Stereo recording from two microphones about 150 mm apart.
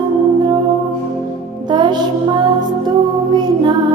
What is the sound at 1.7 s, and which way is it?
Music, 30° right (ahead or behind).